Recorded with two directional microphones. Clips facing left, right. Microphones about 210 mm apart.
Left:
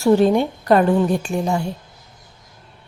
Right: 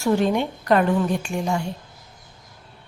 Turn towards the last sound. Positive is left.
turn(degrees=35)  # may be behind; listen again after turning